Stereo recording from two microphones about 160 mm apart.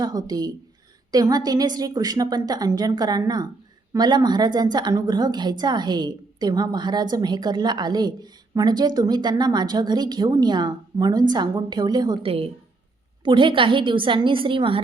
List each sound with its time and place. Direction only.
0.0 s a woman's voice: 25° right (ahead or behind)